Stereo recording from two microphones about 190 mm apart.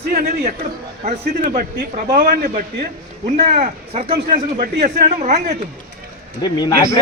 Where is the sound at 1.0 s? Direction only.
45° right (ahead or behind).